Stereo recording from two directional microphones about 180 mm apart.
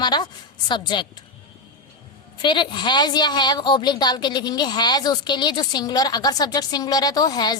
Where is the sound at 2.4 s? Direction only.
25° left (ahead or behind).